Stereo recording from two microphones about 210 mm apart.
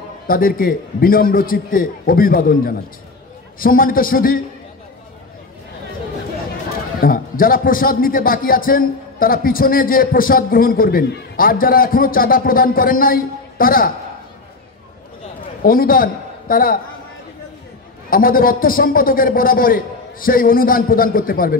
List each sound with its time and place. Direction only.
0.3 s a man's voice: 45° left (ahead or behind)
7.0 s a man's voice: 45° left (ahead or behind)
15.6 s a man's voice: 45° left (ahead or behind)
18.1 s a man's voice: 45° left (ahead or behind)